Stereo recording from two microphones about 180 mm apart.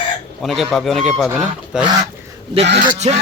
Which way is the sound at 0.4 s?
Centre (ahead or behind).